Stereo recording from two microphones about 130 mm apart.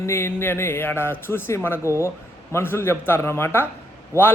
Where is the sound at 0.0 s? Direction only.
20° left (ahead or behind).